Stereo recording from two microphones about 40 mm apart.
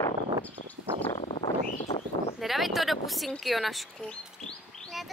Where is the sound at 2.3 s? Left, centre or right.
Centre.